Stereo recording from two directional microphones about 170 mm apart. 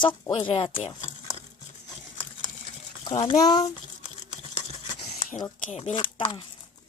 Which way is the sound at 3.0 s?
30° left (ahead or behind).